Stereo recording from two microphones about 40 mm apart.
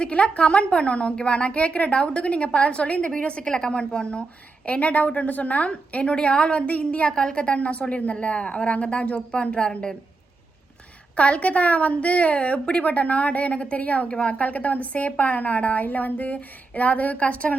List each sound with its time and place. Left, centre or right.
0.0 s a woman's voice: left
11.1 s a woman's voice: left